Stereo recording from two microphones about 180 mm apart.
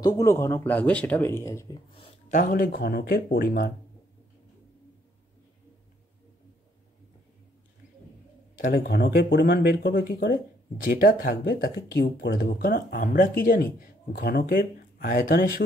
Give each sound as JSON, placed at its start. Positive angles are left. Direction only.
{"t": 0.0, "sound": "speech", "side_deg": 15}
{"t": 2.0, "sound": "speech", "side_deg": 45}
{"t": 8.5, "sound": "speech", "side_deg": 55}
{"t": 11.9, "sound": "speech", "side_deg": 65}